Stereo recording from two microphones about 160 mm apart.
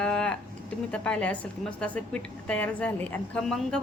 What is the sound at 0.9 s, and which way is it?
Speech, 5° left (ahead or behind).